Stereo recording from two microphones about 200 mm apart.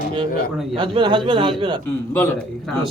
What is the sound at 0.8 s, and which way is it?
Speech, 25° right (ahead or behind).